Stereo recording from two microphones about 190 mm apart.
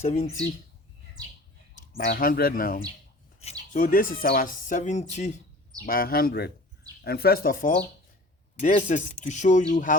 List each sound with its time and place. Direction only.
0.0 s speech: 35° left (ahead or behind)
1.7 s speech: 50° left (ahead or behind)
4.7 s speech: 40° left (ahead or behind)
5.8 s speech: 50° left (ahead or behind)